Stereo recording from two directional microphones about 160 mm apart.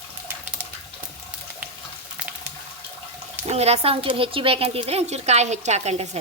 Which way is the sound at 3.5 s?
40° right (ahead or behind).